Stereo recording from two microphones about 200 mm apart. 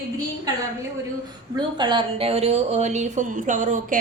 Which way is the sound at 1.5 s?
20° right (ahead or behind).